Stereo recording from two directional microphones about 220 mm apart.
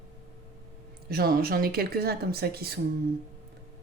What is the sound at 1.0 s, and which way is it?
Speech, 45° right (ahead or behind).